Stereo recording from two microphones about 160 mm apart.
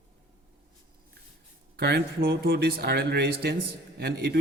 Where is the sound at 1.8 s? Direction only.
85° right.